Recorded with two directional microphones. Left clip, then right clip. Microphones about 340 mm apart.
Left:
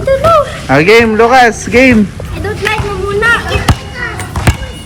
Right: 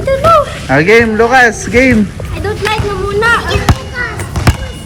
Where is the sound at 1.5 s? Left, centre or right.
Centre.